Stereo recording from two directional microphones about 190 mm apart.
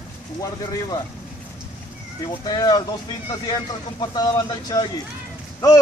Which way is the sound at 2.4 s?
20° left (ahead or behind).